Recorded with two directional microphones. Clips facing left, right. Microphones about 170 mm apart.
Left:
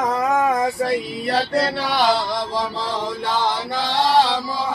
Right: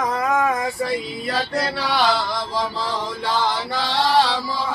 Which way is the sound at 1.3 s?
35° left (ahead or behind).